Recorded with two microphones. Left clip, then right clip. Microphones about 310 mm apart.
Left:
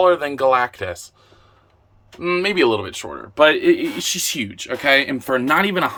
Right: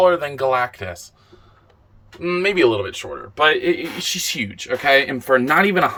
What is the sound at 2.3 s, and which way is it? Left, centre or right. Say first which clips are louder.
Speech: even; centre.